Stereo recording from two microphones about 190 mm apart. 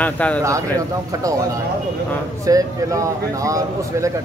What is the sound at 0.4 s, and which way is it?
Speech, 15° right (ahead or behind).